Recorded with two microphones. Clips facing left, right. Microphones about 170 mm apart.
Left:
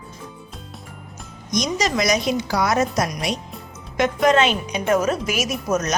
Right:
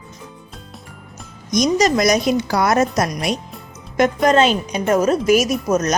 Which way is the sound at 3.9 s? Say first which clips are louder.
Right 3 dB; 40° right (ahead or behind).